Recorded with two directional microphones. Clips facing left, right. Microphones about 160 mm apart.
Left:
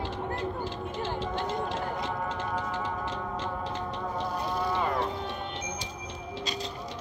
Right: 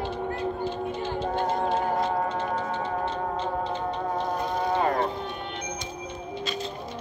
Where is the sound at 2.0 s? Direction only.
90° left.